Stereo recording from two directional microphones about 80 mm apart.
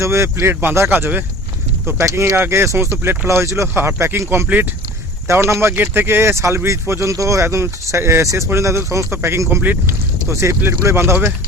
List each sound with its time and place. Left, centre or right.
0.0 s speech: right
2.0 s speech: right
5.3 s speech: right